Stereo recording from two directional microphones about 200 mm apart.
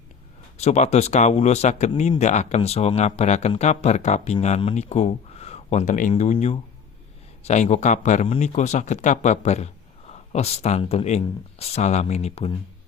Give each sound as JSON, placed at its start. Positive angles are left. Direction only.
{"t": 0.5, "sound": "speech", "side_deg": 35}